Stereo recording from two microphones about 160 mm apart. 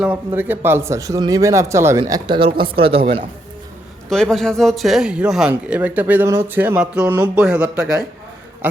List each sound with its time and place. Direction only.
0.0 s speech: 10° right (ahead or behind); by 3.2 s 35° right (ahead or behind)
4.1 s speech: 5° left (ahead or behind)